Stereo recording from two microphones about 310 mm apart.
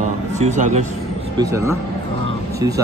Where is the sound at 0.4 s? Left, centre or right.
Right.